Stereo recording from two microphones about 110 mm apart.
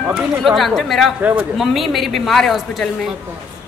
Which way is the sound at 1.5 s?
Centre (ahead or behind).